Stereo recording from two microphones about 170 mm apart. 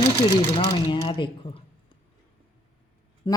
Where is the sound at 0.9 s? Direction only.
30° left (ahead or behind).